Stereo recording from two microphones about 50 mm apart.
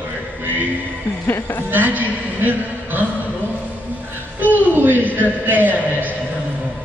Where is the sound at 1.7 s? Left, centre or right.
Right.